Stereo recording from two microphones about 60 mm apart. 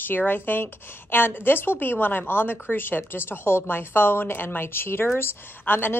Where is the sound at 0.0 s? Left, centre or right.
Left.